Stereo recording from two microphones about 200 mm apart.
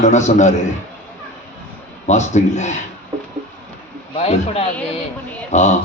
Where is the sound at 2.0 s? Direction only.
35° left (ahead or behind).